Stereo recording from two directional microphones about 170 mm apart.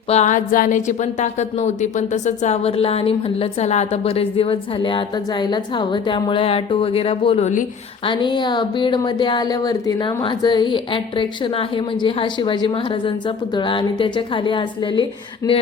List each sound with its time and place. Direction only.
0.1 s speech: 45° left (ahead or behind)
8.0 s a woman's voice: 30° left (ahead or behind)